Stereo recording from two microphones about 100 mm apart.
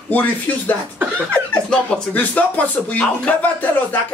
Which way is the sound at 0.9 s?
15° right (ahead or behind).